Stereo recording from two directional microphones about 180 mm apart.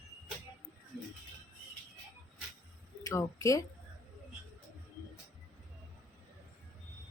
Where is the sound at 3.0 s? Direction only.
15° left (ahead or behind).